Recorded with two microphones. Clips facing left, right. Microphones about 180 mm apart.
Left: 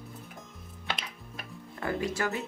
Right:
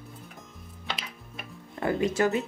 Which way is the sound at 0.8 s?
Centre (ahead or behind).